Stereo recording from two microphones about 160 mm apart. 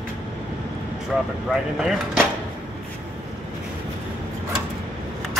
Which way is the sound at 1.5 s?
5° right (ahead or behind).